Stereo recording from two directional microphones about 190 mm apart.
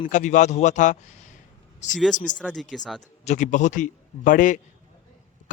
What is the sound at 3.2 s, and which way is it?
A man's voice, 40° left (ahead or behind).